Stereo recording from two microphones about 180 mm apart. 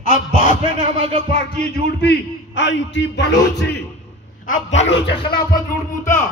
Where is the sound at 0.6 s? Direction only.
30° right (ahead or behind).